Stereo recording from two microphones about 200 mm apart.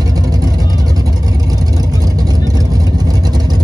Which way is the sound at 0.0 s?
20° right (ahead or behind).